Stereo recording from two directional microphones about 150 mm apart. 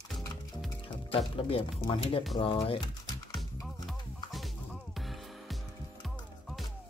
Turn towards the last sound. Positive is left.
turn(degrees=0)  # may be behind; listen again after turning